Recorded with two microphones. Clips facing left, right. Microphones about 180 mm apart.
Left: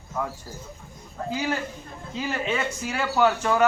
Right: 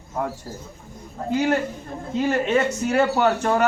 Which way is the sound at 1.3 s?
55° right (ahead or behind).